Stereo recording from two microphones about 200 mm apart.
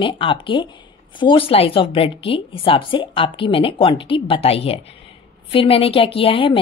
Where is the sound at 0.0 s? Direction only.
25° left (ahead or behind).